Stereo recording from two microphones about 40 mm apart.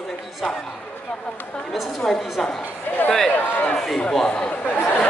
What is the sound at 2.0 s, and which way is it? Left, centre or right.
Speech, centre.